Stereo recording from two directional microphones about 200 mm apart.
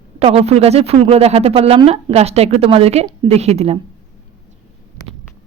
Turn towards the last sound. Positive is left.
turn(degrees=-30)  # may be behind; listen again after turning